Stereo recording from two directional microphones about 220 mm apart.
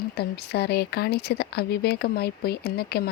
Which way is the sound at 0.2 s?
50° left (ahead or behind).